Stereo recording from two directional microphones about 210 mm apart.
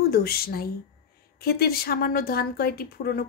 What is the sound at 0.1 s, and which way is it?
A woman's voice, 45° left (ahead or behind).